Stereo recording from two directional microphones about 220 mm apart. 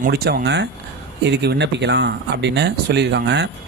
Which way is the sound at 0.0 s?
45° right (ahead or behind).